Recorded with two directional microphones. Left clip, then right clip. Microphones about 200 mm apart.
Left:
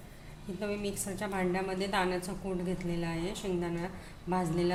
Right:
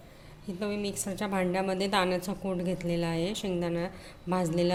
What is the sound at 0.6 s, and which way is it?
A woman's voice, 40° right (ahead or behind).